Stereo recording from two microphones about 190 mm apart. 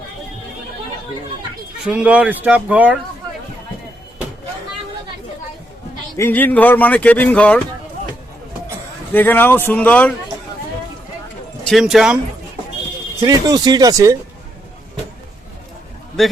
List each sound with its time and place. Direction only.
1.8 s speech: 5° right (ahead or behind)
6.1 s speech: 10° left (ahead or behind)
9.1 s speech: 10° left (ahead or behind)
11.6 s speech: centre (ahead or behind)
13.2 s speech: 20° right (ahead or behind)
16.2 s a man's voice: centre (ahead or behind)